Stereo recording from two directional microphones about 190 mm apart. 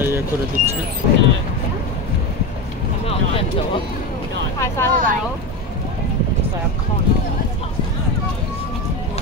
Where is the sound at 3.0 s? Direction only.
30° left (ahead or behind).